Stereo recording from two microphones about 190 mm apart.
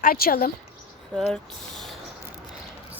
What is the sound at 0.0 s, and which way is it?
Speech, 50° left (ahead or behind).